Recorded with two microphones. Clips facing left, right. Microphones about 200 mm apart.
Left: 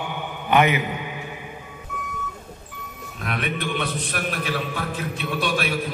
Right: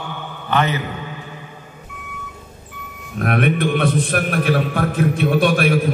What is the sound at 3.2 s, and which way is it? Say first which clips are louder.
A man's voice: right 10 dB; 55° right (ahead or behind).